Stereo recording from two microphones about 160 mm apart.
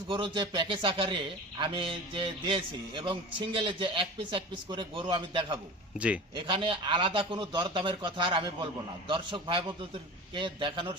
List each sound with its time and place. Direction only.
0.1 s a man's voice: 30° right (ahead or behind)